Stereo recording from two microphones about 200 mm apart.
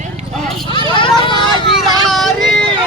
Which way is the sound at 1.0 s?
25° left (ahead or behind).